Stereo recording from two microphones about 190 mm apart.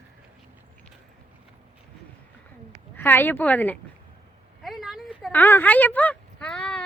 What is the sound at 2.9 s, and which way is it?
Speech, 10° left (ahead or behind).